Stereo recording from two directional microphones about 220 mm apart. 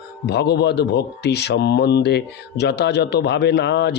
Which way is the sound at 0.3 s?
50° left (ahead or behind).